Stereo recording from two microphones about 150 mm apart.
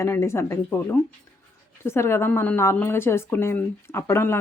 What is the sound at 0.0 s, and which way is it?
A woman's voice, 20° left (ahead or behind).